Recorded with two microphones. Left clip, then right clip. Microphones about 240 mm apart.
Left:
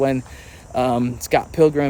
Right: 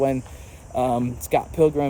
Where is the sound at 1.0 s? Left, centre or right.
Left.